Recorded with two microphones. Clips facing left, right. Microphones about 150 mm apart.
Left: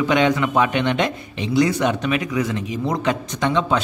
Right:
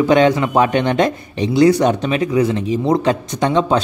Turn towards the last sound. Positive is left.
turn(degrees=-35)  # may be behind; listen again after turning